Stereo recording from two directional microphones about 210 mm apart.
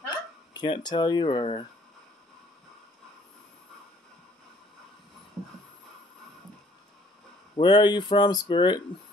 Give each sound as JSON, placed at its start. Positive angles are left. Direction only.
{"t": 0.5, "sound": "speech", "side_deg": 20}
{"t": 7.5, "sound": "speech", "side_deg": 20}